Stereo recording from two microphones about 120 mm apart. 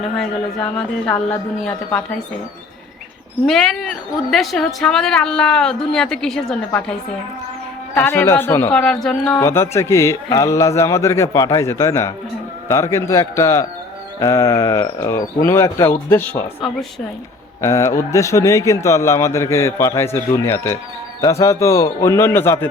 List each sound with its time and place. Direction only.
0.2 s speech: 10° left (ahead or behind)
3.4 s a woman's voice: 5° left (ahead or behind)
7.9 s a man's voice: 20° left (ahead or behind)
8.7 s speech: 5° left (ahead or behind)
9.4 s a man's voice: 20° left (ahead or behind)
17.6 s a man's voice: 25° left (ahead or behind)